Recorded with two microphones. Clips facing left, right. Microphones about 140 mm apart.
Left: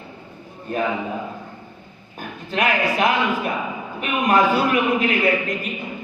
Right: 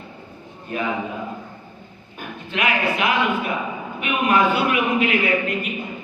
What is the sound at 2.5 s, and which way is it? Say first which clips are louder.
A man's voice: left 2 dB; 40° left (ahead or behind).